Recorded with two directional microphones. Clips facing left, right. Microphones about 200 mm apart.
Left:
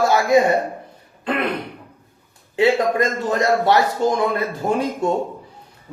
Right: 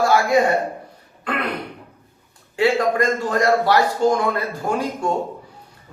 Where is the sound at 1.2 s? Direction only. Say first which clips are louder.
Left 3 dB; 25° left (ahead or behind).